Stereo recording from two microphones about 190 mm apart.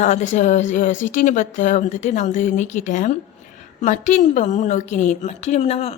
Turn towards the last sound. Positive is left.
turn(degrees=35)  # may be behind; listen again after turning